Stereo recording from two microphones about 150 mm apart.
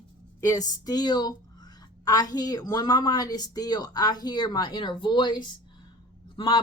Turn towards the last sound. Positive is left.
turn(degrees=30)  # may be behind; listen again after turning